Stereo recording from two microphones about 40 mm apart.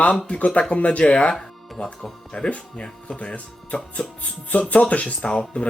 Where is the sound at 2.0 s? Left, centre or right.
Centre.